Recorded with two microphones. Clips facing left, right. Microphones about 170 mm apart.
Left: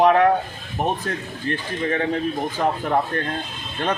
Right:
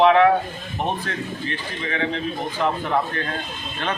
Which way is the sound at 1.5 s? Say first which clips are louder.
Left 5 dB; 50° left (ahead or behind).